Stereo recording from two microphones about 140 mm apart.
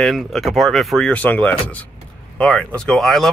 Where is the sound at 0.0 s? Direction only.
Centre (ahead or behind).